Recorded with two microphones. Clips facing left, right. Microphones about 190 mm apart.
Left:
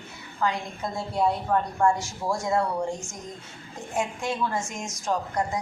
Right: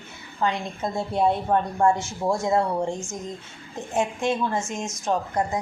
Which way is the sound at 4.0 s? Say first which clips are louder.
Right 4 dB; 25° right (ahead or behind).